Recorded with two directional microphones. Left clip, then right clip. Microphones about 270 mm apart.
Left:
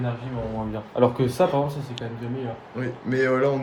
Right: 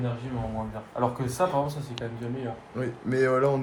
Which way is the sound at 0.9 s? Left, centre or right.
Left.